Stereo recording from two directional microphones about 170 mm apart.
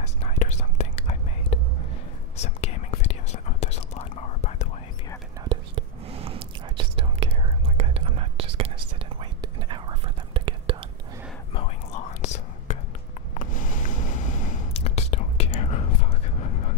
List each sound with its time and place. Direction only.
0.0 s whispering: 40° left (ahead or behind)
5.5 s whispering: 35° right (ahead or behind)
11.5 s whispering: 40° left (ahead or behind)
13.3 s a sound: 50° left (ahead or behind)